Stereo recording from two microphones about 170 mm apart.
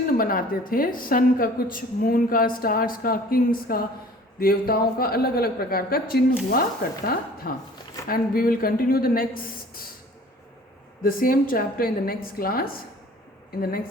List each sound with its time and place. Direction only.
0.2 s a woman's voice: 55° left (ahead or behind)
11.0 s a woman's voice: 55° left (ahead or behind)